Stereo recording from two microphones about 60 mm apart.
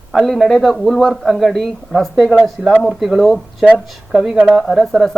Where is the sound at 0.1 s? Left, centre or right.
Centre.